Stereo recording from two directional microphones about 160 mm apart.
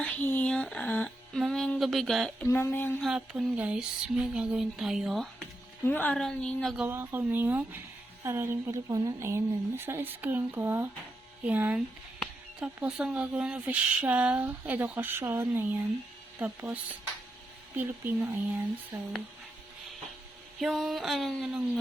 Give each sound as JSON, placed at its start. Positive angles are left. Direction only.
{"t": 0.0, "sound": "speech", "side_deg": 10}
{"t": 2.5, "sound": "speech", "side_deg": 15}
{"t": 3.0, "sound": "speech", "side_deg": -5}
{"t": 5.8, "sound": "speech", "side_deg": 10}
{"t": 6.8, "sound": "speech", "side_deg": -15}
{"t": 17.7, "sound": "speech", "side_deg": -15}
{"t": 20.6, "sound": "speech", "side_deg": 0}